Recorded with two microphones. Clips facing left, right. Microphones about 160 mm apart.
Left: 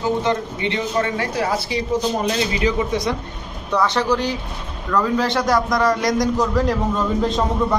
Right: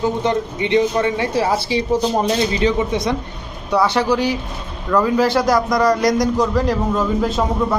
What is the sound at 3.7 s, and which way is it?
A man's voice, 10° right (ahead or behind).